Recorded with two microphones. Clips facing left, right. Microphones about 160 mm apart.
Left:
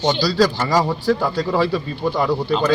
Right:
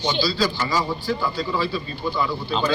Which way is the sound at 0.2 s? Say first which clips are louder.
Left 5 dB; 80° left.